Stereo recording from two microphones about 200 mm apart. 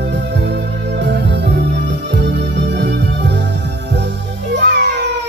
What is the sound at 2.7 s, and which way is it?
Music, 60° right (ahead or behind).